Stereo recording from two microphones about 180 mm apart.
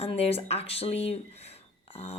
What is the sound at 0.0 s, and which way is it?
Speech, 35° left (ahead or behind).